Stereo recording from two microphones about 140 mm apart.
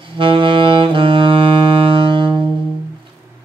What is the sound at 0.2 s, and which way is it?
Saxophone, 40° right (ahead or behind).